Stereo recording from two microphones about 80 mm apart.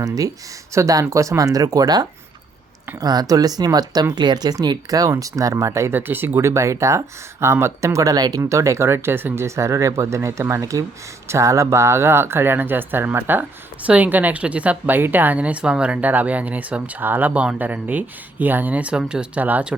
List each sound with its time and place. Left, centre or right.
0.0 s speech: right
5.9 s speech: right
6.4 s speech: right
8.4 s speech: right; by 19.7 s centre